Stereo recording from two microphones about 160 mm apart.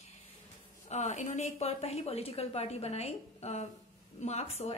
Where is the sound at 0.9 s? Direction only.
45° left (ahead or behind).